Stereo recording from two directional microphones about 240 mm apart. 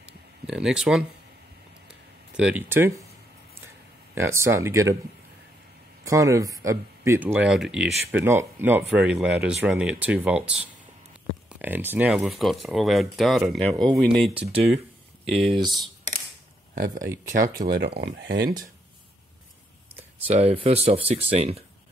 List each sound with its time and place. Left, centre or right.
0.5 s speech: centre
2.3 s speech: centre
4.1 s speech: centre
6.0 s speech: centre
11.6 s speech: centre
14.3 s speech: right
16.7 s speech: right
20.2 s speech: right